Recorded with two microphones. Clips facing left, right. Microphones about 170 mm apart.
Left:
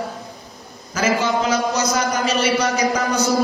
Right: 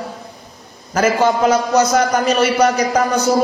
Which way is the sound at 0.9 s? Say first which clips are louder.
Right 5 dB; 50° right (ahead or behind).